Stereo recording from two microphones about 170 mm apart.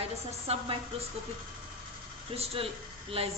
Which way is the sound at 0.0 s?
35° right (ahead or behind).